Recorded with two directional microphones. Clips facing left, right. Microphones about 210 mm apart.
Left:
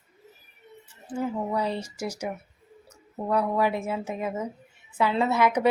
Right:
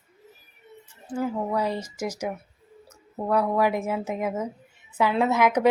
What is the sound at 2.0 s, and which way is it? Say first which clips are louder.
Speech: right 2 dB; 90° right.